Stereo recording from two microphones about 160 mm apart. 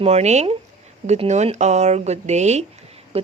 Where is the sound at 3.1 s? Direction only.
40° right (ahead or behind).